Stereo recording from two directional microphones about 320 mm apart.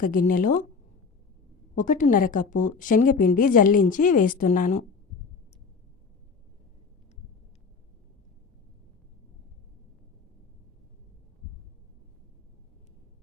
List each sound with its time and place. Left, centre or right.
0.0 s a woman's voice: left
1.7 s a woman's voice: left